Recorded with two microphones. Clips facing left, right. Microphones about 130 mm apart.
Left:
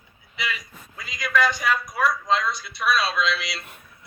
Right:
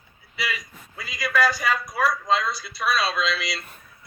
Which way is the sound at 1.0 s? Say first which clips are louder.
Even; 5° right (ahead or behind).